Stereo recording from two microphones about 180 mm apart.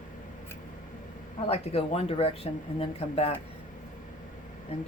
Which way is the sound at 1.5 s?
35° left (ahead or behind).